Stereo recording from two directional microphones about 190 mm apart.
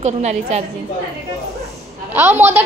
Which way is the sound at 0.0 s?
35° right (ahead or behind).